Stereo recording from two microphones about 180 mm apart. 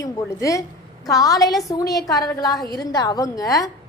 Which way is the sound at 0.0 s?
20° left (ahead or behind).